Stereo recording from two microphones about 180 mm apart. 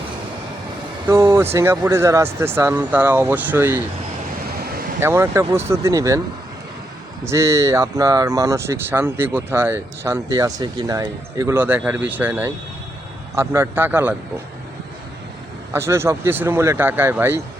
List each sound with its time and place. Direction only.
1.0 s speech: 15° right (ahead or behind)
4.6 s vehicle: 55° right (ahead or behind)
4.9 s speech: 15° right (ahead or behind)
7.3 s speech: 15° right (ahead or behind)
15.7 s speech: 15° right (ahead or behind)